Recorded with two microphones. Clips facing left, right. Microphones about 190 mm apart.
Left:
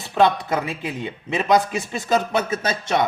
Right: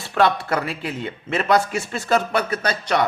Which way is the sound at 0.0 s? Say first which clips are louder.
Left 1 dB; 20° left (ahead or behind).